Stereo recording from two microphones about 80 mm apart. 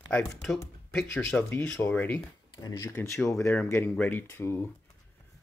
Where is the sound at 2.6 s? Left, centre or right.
Left.